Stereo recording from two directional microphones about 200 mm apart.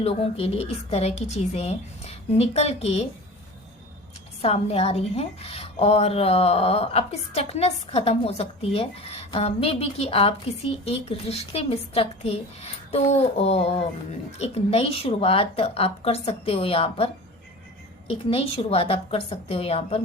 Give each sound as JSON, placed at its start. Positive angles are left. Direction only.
{"t": 0.0, "sound": "a woman's voice", "side_deg": 30}
{"t": 4.4, "sound": "a woman's voice", "side_deg": 30}
{"t": 18.1, "sound": "a woman's voice", "side_deg": 30}